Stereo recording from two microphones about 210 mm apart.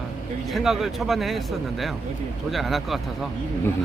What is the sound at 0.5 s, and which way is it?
Speech, centre (ahead or behind).